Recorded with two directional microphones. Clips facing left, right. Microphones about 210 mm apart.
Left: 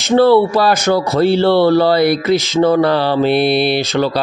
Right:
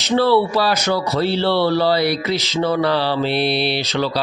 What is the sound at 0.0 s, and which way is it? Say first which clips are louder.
Speech: left 6 dB; 50° left (ahead or behind).